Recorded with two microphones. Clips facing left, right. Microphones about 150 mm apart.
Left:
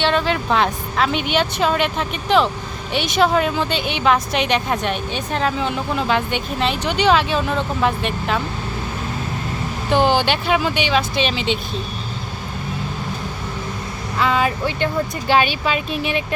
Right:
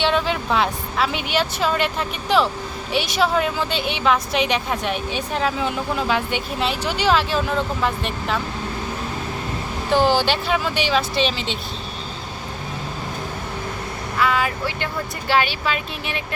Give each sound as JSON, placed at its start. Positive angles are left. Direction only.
{"t": 0.0, "sound": "a woman's voice", "side_deg": -5}
{"t": 9.9, "sound": "a woman's voice", "side_deg": -5}
{"t": 14.2, "sound": "speech", "side_deg": 25}